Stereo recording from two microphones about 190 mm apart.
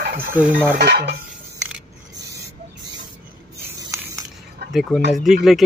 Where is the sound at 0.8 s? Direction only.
60° right (ahead or behind).